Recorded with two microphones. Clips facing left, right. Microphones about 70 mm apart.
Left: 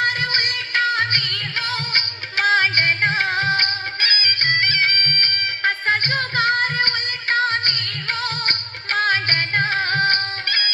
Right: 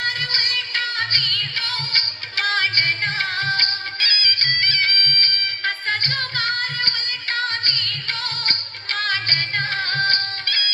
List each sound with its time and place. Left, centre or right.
0.0 s music: left